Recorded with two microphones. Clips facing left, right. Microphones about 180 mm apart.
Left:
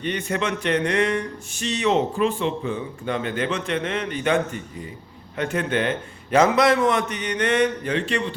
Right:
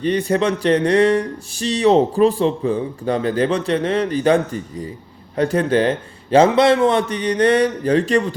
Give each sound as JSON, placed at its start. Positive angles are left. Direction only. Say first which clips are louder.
{"t": 0.0, "sound": "speech", "louder": "right 8 dB", "side_deg": -35}